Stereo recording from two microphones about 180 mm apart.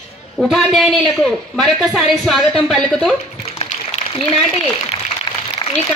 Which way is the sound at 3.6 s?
35° left (ahead or behind).